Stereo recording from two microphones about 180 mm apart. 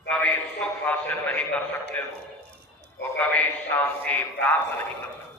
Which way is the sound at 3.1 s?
10° left (ahead or behind).